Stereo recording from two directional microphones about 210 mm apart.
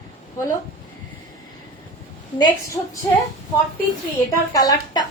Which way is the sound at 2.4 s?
15° left (ahead or behind).